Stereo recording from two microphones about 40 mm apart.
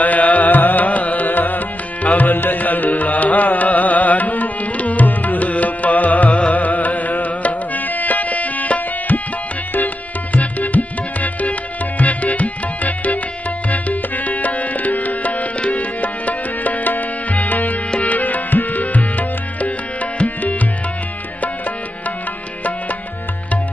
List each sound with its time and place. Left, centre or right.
0.0 s music: left
10.3 s music: left
12.0 s tabla: left
13.7 s music: left